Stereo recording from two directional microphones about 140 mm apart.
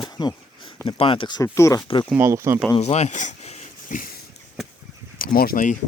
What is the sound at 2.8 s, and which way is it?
Speech, 50° left (ahead or behind).